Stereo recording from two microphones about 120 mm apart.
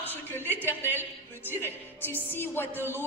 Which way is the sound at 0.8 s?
15° right (ahead or behind).